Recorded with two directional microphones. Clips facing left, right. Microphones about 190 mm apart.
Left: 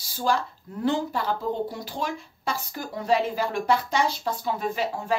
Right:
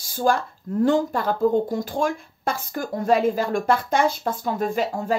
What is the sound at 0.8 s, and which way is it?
Speech, 45° right (ahead or behind).